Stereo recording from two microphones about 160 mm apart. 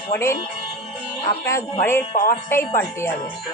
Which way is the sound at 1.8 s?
15° left (ahead or behind).